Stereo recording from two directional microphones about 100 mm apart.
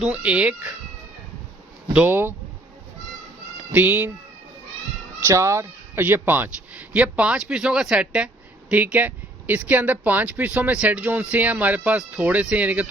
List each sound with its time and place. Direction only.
0.1 s speech: 15° right (ahead or behind)
1.9 s speech: 15° right (ahead or behind)
3.7 s speech: 20° right (ahead or behind)
5.2 s speech: 30° right (ahead or behind); by 12.9 s 15° right (ahead or behind)